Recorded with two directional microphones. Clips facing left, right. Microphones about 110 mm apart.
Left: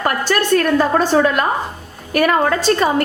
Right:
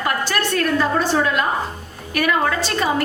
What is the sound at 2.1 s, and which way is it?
Speech, 40° left (ahead or behind).